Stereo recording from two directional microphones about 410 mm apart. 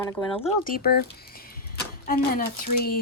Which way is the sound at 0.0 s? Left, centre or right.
Centre.